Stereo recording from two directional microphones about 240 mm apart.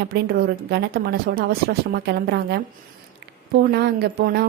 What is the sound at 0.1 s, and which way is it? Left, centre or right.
A woman's voice, right.